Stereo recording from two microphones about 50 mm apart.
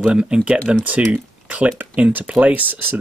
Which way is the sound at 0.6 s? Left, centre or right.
Right.